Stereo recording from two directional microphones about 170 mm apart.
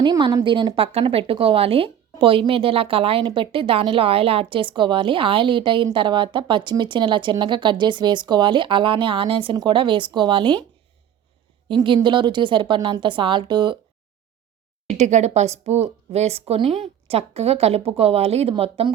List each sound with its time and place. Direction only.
0.0 s a woman's voice: 25° right (ahead or behind)
11.7 s a woman's voice: 30° right (ahead or behind)
14.8 s speech: 40° right (ahead or behind)